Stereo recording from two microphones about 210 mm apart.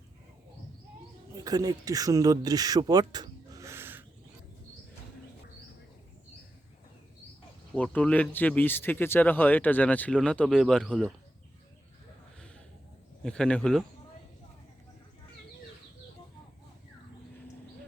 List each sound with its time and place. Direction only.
1.5 s speech: 15° right (ahead or behind)
7.7 s speech: 5° left (ahead or behind)
13.2 s speech: 5° left (ahead or behind)